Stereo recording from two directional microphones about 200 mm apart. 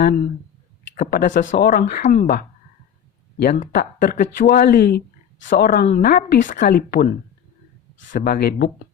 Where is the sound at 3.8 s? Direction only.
40° left (ahead or behind).